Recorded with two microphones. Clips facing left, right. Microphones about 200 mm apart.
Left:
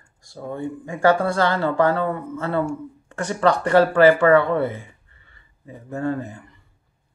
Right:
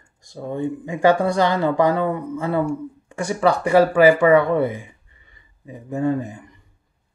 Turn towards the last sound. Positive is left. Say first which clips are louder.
# right 3 dB
turn(degrees=-15)  # may be behind; listen again after turning